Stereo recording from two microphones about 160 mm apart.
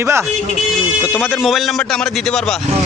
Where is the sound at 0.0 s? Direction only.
15° right (ahead or behind).